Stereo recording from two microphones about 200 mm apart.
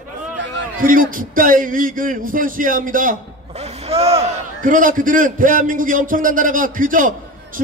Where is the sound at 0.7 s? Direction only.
45° right (ahead or behind).